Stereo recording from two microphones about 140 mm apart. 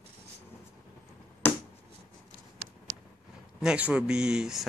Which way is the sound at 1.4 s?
15° left (ahead or behind).